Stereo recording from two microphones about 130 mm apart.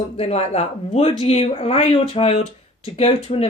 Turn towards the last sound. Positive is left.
turn(degrees=50)  # may be behind; listen again after turning